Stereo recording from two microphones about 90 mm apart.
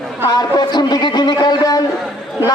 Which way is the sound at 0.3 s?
50° left (ahead or behind).